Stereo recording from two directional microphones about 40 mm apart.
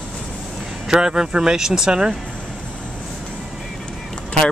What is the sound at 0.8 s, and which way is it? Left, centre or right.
Speech, centre.